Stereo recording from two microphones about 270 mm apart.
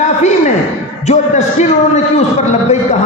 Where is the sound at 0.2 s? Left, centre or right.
Left.